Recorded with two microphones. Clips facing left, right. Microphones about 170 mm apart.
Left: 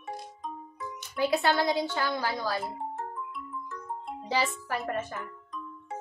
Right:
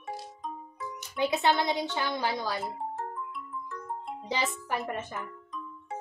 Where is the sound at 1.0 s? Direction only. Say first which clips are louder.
Left 2 dB; 20° right (ahead or behind).